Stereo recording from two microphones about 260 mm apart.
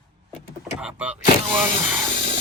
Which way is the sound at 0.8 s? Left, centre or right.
Centre.